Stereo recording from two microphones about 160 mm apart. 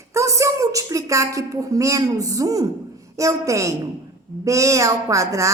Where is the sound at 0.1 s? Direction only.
20° right (ahead or behind).